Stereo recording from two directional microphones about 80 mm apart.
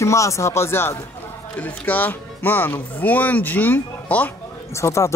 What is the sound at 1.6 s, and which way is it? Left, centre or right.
Speech, left.